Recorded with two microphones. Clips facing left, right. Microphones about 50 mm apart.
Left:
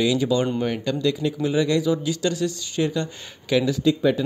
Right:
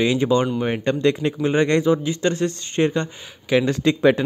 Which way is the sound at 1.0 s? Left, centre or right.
Right.